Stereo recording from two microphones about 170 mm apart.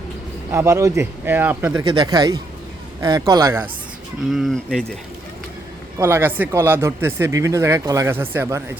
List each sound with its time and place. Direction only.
0.5 s speech: 15° right (ahead or behind)
1.8 s speech: 30° right (ahead or behind)
4.3 s speech: centre (ahead or behind)
6.0 s speech: 15° right (ahead or behind)